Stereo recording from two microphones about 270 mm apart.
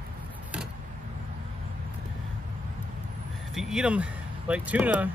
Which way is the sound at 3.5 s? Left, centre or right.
Centre.